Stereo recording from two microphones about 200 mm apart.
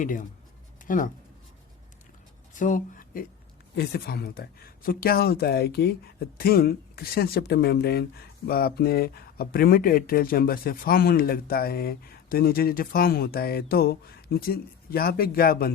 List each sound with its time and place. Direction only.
0.0 s speech: 40° left (ahead or behind)
2.6 s speech: 40° left (ahead or behind)
3.8 s speech: 55° left (ahead or behind)